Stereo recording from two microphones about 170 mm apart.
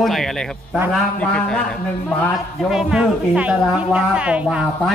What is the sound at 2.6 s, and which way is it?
A woman's voice, 5° right (ahead or behind).